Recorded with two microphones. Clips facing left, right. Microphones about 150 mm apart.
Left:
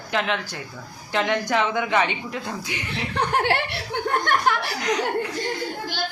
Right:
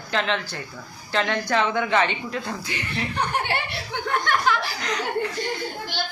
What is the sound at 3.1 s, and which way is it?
Speech, 90° left.